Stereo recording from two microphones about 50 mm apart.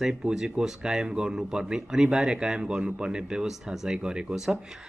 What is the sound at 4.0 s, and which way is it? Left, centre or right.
Speech, centre.